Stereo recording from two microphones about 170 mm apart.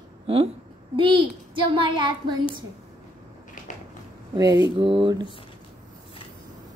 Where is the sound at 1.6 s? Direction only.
30° right (ahead or behind).